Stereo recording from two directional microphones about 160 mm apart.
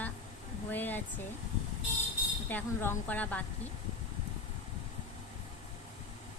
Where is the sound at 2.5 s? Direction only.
10° left (ahead or behind).